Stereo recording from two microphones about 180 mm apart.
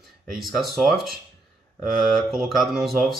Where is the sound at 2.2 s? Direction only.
Centre (ahead or behind).